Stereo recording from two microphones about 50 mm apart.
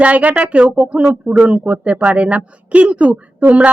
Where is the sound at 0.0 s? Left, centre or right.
Right.